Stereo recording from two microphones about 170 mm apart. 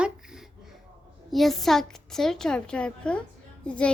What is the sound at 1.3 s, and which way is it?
A woman's voice, centre (ahead or behind).